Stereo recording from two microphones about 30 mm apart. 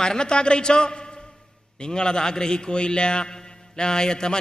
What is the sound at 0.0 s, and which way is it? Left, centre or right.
A man's voice, left.